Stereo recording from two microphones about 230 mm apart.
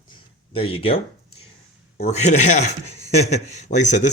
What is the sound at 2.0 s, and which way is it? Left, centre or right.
Speech, left.